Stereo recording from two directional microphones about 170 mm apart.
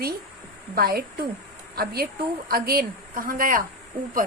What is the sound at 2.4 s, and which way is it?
A woman's voice, 60° right (ahead or behind).